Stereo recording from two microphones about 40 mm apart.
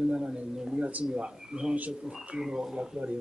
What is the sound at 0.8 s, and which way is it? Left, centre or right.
Speech, right.